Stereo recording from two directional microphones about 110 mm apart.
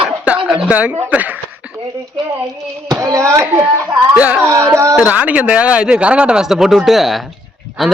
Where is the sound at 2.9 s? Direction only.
30° right (ahead or behind).